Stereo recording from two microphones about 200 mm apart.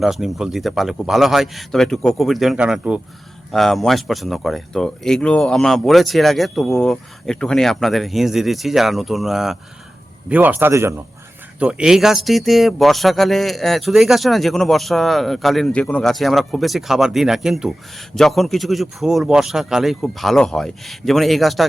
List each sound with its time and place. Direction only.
0.0 s a man's voice: centre (ahead or behind)